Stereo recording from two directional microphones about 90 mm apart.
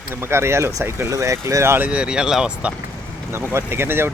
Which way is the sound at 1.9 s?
10° right (ahead or behind).